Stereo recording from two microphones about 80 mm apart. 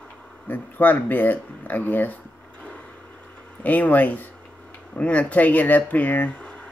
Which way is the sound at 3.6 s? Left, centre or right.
Centre.